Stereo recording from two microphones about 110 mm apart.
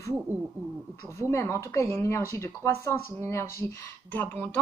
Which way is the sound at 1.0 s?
25° left (ahead or behind).